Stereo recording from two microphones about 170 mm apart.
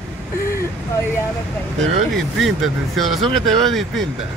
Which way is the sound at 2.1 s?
Centre (ahead or behind).